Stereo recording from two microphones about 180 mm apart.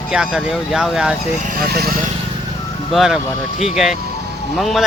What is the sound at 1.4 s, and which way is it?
Speech, 60° right (ahead or behind).